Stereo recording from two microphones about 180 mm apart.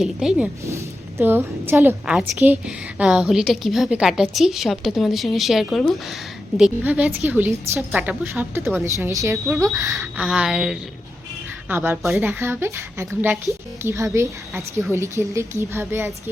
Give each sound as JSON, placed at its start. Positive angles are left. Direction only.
{"t": 0.0, "sound": "a woman's voice", "side_deg": -5}
{"t": 7.9, "sound": "a woman's voice", "side_deg": 0}
{"t": 8.3, "sound": "a woman's voice", "side_deg": -15}
{"t": 10.2, "sound": "a woman's voice", "side_deg": -5}